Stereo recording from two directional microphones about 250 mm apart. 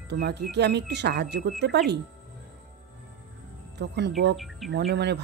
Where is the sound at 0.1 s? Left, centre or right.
Right.